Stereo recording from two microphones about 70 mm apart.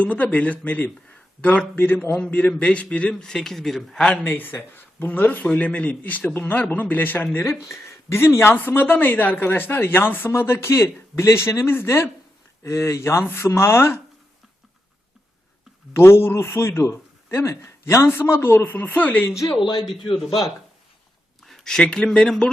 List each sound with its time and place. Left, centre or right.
0.0 s speech: left; by 4.0 s centre
4.2 s speech: left
7.9 s a man's voice: left
16.0 s a man's voice: left
19.8 s a man's voice: centre